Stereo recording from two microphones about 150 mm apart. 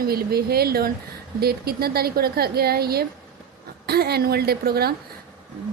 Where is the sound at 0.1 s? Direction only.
90° right.